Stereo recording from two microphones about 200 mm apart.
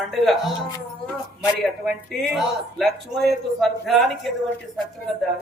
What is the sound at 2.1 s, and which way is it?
A man's voice, centre (ahead or behind).